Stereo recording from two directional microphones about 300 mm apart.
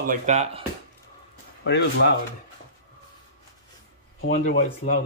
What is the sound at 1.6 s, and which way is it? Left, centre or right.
Speech, left.